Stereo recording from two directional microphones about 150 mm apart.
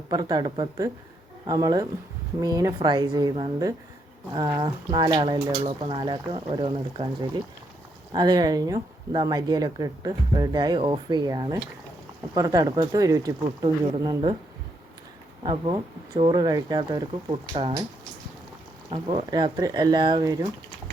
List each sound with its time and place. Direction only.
0.1 s speech: 30° right (ahead or behind)
8.1 s speech: 30° right (ahead or behind)
15.4 s speech: 35° right (ahead or behind)
17.5 s speech: 45° right (ahead or behind)
18.9 s speech: 35° right (ahead or behind)